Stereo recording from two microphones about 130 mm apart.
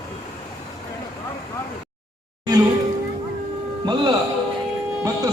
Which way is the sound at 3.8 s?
35° right (ahead or behind).